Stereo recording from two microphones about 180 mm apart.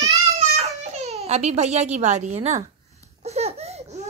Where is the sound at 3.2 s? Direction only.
35° right (ahead or behind).